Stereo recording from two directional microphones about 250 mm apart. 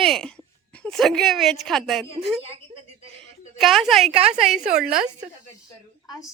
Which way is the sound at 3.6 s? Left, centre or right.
Centre.